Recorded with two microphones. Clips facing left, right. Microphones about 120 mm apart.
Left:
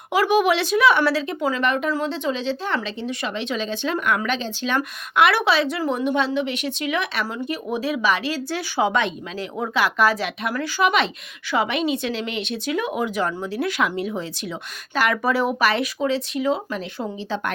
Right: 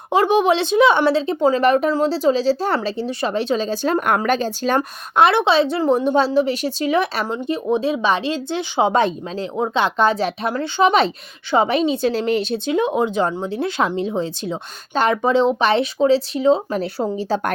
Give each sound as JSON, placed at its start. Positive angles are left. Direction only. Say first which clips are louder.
{"t": 0.1, "sound": "speech", "louder": "right 3 dB", "side_deg": -30}
{"t": 8.9, "sound": "speech", "louder": "right 5 dB", "side_deg": -35}
{"t": 17.0, "sound": "speech", "louder": "right 5 dB", "side_deg": -40}